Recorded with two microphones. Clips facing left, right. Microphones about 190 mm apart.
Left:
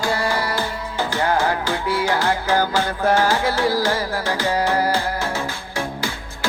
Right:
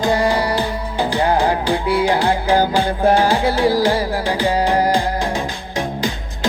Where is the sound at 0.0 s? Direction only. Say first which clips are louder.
Right 5 dB; 20° right (ahead or behind).